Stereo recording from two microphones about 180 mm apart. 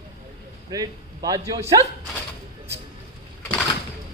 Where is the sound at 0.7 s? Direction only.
20° right (ahead or behind).